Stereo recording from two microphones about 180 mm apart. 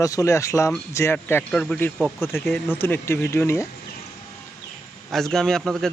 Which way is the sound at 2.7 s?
10° left (ahead or behind).